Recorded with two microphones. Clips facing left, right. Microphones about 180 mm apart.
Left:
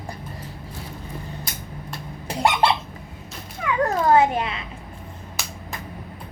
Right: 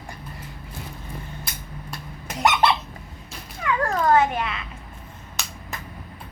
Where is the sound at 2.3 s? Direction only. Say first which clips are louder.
Even; 30° left (ahead or behind).